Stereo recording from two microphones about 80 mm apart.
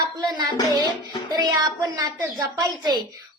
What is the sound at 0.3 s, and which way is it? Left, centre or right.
Music, right.